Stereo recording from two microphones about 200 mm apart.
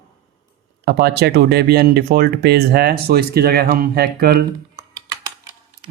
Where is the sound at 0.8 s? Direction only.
55° right (ahead or behind).